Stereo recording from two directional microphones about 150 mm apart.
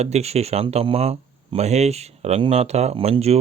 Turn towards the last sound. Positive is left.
turn(degrees=-45)  # may be behind; listen again after turning